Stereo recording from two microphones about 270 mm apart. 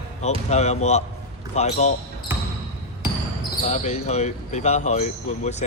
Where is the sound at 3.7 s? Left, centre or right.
Left.